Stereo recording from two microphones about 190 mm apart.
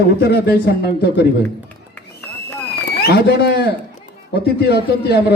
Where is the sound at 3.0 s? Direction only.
55° left (ahead or behind).